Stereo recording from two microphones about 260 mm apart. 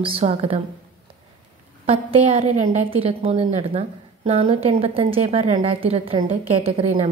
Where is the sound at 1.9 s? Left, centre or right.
Right.